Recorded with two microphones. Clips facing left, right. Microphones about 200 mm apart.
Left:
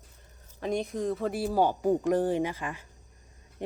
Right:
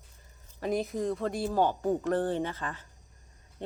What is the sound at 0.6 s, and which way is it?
Speech, centre (ahead or behind).